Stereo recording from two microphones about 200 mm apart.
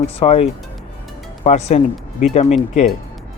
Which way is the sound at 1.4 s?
35° left (ahead or behind).